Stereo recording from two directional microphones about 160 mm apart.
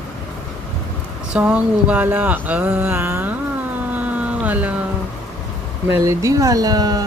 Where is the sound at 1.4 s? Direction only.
10° right (ahead or behind).